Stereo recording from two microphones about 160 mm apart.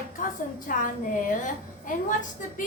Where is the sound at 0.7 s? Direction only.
55° left (ahead or behind).